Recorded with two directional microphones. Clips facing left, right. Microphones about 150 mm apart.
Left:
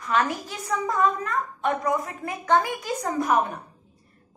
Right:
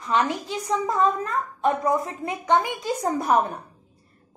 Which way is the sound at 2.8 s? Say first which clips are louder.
Right 2 dB; 30° right (ahead or behind).